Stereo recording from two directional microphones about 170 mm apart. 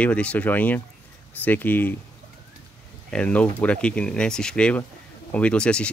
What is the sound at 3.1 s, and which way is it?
Speech, 5° left (ahead or behind).